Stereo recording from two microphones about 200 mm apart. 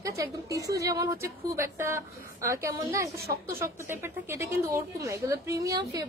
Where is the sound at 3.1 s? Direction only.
50° right (ahead or behind).